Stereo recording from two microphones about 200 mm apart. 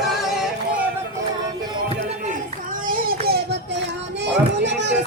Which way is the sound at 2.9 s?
45° right (ahead or behind).